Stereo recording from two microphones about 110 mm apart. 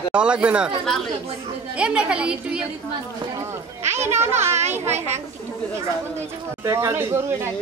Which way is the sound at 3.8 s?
90° right.